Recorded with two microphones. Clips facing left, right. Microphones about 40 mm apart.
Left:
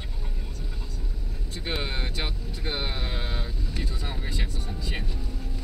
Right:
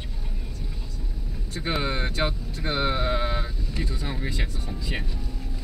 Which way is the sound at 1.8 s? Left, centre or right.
Centre.